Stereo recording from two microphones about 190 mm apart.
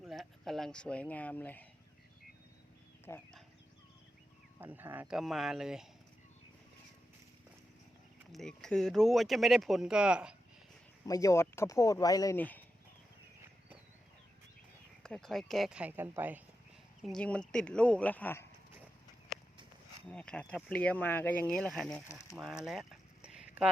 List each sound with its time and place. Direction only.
0.1 s speech: centre (ahead or behind)
3.1 s speech: 15° left (ahead or behind)
4.6 s speech: 10° right (ahead or behind)
8.3 s speech: centre (ahead or behind)
11.0 s speech: 20° left (ahead or behind)
15.0 s speech: 5° left (ahead or behind)
17.0 s speech: 5° left (ahead or behind)
20.1 s speech: 5° left (ahead or behind)
22.0 s speech: 15° left (ahead or behind)
22.4 s a sound: centre (ahead or behind)